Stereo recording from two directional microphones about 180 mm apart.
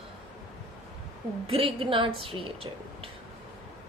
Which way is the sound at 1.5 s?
30° right (ahead or behind).